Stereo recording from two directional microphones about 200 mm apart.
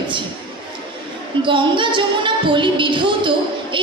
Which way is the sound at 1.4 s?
25° right (ahead or behind).